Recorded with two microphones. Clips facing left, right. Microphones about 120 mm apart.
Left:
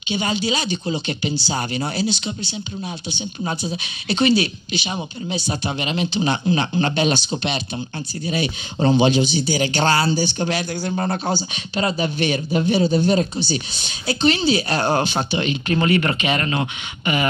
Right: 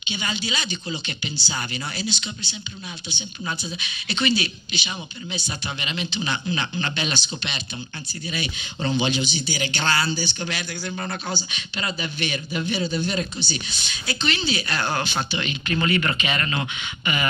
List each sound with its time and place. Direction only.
0.1 s speech: 40° left (ahead or behind)